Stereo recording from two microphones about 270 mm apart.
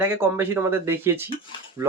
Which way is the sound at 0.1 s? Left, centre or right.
Centre.